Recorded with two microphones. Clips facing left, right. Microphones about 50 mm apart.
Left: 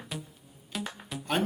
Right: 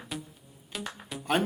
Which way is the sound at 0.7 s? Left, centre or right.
Centre.